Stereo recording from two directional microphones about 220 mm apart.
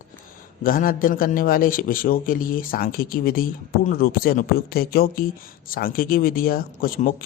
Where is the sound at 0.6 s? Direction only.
40° left (ahead or behind).